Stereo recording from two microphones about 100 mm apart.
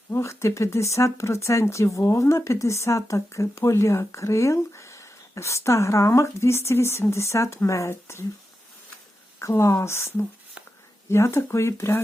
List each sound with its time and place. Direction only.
0.1 s speech: 30° left (ahead or behind)
9.4 s speech: 30° left (ahead or behind)